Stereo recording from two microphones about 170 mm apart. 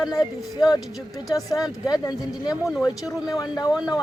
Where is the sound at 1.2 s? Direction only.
20° left (ahead or behind).